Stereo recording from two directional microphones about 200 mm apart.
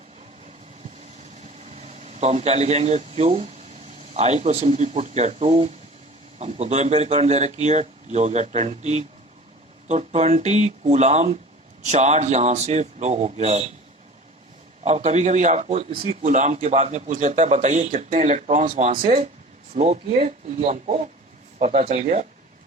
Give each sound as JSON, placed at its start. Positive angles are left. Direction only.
{"t": 1.5, "sound": "a man's voice", "side_deg": -35}
{"t": 14.8, "sound": "a man's voice", "side_deg": -35}